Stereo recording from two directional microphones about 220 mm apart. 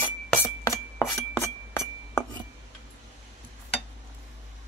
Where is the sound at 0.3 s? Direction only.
10° left (ahead or behind).